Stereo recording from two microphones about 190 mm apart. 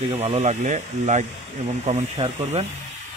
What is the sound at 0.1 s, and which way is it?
Speech, 35° right (ahead or behind).